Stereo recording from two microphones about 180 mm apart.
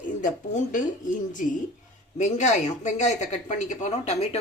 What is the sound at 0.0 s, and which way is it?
Speech, 45° left (ahead or behind).